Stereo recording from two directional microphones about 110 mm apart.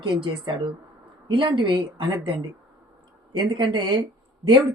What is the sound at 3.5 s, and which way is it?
Speech, 40° right (ahead or behind).